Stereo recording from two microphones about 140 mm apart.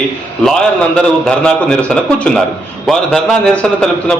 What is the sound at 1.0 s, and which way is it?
Speech, 5° left (ahead or behind).